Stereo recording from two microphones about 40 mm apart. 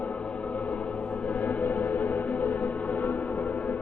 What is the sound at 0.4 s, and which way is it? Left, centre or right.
Music, left.